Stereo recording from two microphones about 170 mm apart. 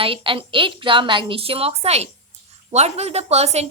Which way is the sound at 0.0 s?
30° right (ahead or behind).